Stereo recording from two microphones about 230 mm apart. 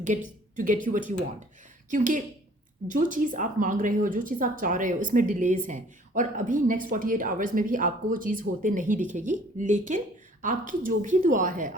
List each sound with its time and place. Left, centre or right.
0.0 s a woman's voice: right